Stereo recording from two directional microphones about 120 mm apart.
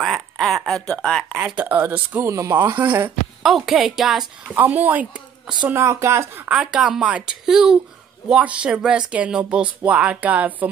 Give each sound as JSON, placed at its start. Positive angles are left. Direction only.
{"t": 0.0, "sound": "a sound", "side_deg": 0}
{"t": 0.8, "sound": "a woman's voice", "side_deg": 5}
{"t": 1.4, "sound": "speech", "side_deg": -10}
{"t": 2.7, "sound": "speech", "side_deg": -15}
{"t": 3.4, "sound": "a woman's voice", "side_deg": 0}
{"t": 4.5, "sound": "speech", "side_deg": -15}
{"t": 6.5, "sound": "speech", "side_deg": -5}